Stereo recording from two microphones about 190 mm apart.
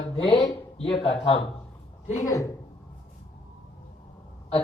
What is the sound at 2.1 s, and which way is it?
Speech, 15° left (ahead or behind).